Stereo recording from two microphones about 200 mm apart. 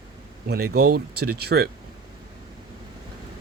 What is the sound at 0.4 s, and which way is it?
Speech, 50° right (ahead or behind).